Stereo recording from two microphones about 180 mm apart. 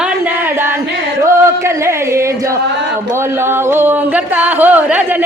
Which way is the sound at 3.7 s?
10° right (ahead or behind).